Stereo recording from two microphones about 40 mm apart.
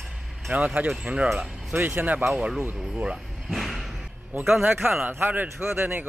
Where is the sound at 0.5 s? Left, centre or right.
Right.